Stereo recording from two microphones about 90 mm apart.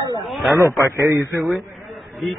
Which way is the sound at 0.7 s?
35° right (ahead or behind).